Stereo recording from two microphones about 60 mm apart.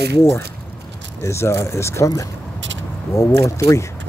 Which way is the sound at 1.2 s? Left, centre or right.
Left.